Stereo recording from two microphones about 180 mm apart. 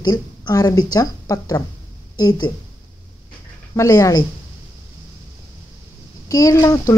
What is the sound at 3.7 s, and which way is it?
Speech, 15° left (ahead or behind).